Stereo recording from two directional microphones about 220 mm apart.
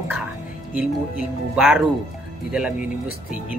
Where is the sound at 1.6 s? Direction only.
5° right (ahead or behind).